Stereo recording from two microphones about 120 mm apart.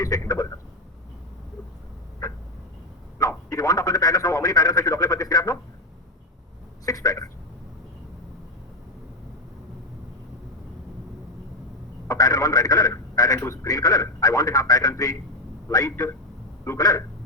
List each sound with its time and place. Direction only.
0.0 s speech: 30° left (ahead or behind)
3.2 s a man's voice: 30° left (ahead or behind)
6.8 s speech: 30° left (ahead or behind)
12.0 s speech: 30° left (ahead or behind)